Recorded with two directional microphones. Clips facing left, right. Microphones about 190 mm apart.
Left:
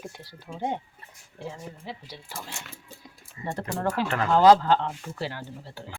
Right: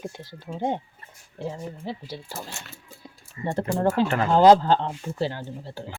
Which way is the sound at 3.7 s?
30° right (ahead or behind).